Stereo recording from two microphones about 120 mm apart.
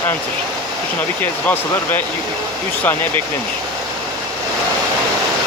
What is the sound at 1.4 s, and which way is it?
Speech, 15° left (ahead or behind).